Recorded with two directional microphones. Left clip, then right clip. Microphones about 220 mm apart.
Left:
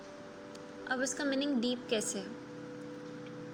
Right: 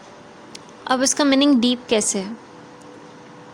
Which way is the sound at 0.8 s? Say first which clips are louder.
Right 16 dB; 35° right (ahead or behind).